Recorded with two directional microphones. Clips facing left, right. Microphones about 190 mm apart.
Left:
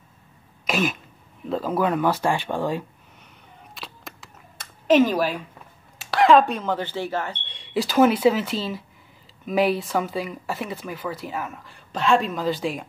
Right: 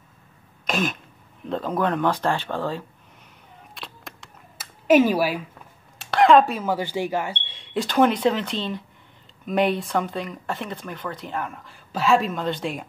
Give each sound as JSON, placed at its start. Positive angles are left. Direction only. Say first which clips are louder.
{"t": 0.7, "sound": "throat clearing", "louder": "left 1 dB", "side_deg": 5}
{"t": 1.4, "sound": "speech", "louder": "left 1 dB", "side_deg": 5}
{"t": 3.7, "sound": "a sound", "louder": "even", "side_deg": 0}
{"t": 4.8, "sound": "speech", "louder": "right 1 dB", "side_deg": -10}
{"t": 5.9, "sound": "speech", "louder": "right 1 dB", "side_deg": 0}